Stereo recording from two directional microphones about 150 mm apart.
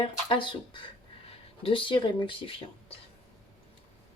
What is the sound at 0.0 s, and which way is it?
Speech, 35° left (ahead or behind).